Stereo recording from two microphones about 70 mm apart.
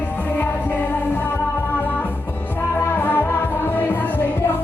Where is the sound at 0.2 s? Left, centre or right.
Left.